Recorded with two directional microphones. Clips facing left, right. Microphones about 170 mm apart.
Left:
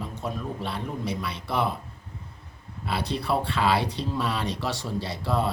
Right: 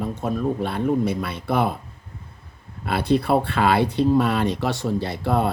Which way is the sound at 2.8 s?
55° right (ahead or behind).